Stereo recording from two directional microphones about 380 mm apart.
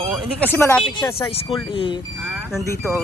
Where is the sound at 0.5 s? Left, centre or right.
Centre.